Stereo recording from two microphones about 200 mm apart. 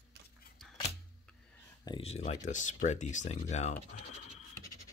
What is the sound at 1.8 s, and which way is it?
Speech, 25° left (ahead or behind).